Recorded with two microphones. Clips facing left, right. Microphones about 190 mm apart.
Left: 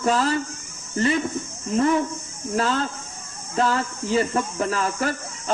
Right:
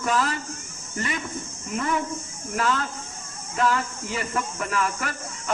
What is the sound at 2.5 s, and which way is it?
Speech, 30° left (ahead or behind).